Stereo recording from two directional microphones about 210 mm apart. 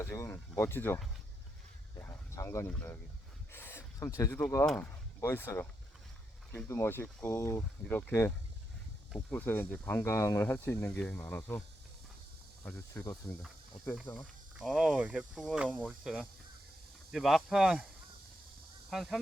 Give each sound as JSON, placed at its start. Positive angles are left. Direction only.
{"t": 0.0, "sound": "speech", "side_deg": 10}
{"t": 2.0, "sound": "a sound", "side_deg": 10}
{"t": 3.5, "sound": "speech", "side_deg": 10}
{"t": 12.6, "sound": "speech", "side_deg": 10}
{"t": 14.5, "sound": "speech", "side_deg": 0}
{"t": 18.9, "sound": "speech", "side_deg": 0}